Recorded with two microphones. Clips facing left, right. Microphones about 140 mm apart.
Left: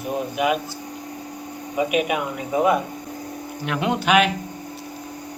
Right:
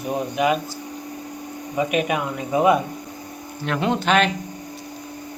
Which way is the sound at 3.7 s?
10° left (ahead or behind).